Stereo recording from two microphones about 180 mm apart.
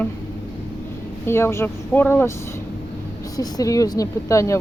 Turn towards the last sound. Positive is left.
turn(degrees=15)  # may be behind; listen again after turning